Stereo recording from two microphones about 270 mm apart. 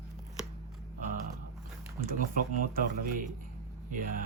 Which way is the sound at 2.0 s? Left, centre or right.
Right.